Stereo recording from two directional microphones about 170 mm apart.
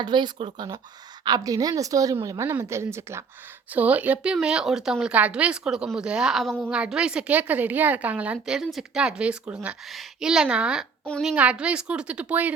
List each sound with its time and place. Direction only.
0.0 s a woman's voice: 25° right (ahead or behind); by 12.5 s 10° right (ahead or behind)